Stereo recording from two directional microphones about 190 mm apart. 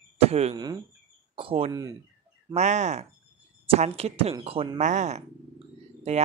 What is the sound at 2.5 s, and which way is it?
Speech, 35° right (ahead or behind).